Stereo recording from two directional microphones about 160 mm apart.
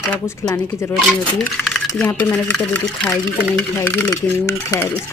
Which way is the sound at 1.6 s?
5° left (ahead or behind).